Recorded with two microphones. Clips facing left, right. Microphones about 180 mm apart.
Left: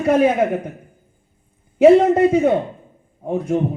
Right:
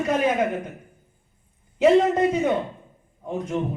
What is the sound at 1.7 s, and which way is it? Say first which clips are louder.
Speech: left 6 dB; 55° left (ahead or behind).